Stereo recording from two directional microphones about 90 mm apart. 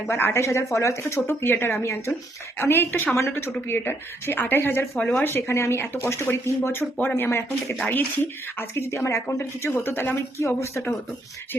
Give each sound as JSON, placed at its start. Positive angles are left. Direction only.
{"t": 0.1, "sound": "speech", "side_deg": 25}
{"t": 4.9, "sound": "speech", "side_deg": 10}
{"t": 5.2, "sound": "speech", "side_deg": 25}